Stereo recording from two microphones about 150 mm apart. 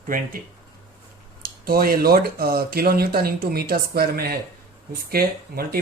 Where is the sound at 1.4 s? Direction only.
80° right.